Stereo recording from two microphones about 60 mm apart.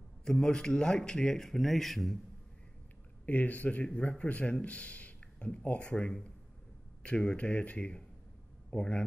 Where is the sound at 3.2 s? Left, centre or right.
Left.